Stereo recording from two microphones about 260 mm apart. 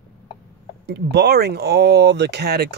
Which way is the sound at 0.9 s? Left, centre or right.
Right.